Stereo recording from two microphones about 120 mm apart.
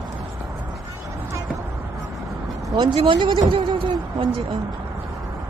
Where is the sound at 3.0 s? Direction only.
45° right (ahead or behind).